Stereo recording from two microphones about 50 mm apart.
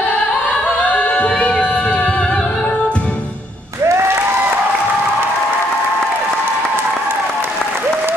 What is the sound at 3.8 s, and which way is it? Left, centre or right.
Applause, right.